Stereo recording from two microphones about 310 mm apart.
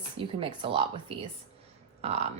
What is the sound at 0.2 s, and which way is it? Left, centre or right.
A woman's voice, centre.